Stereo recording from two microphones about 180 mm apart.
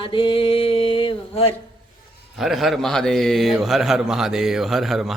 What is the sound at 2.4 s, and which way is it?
A man's voice, centre (ahead or behind).